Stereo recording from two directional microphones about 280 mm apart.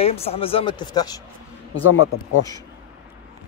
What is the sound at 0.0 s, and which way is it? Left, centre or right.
Speech, left.